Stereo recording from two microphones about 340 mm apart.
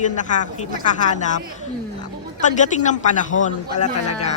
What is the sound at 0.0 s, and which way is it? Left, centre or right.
A man's voice, left.